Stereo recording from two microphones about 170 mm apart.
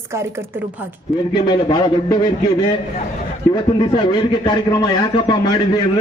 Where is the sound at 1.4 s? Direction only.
25° left (ahead or behind).